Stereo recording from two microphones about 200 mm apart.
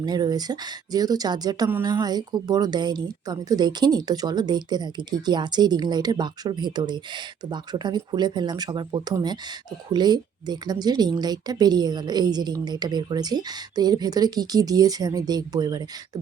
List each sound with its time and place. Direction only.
0.0 s speech: 20° right (ahead or behind)